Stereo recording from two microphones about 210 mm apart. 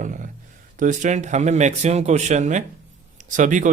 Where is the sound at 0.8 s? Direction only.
35° right (ahead or behind).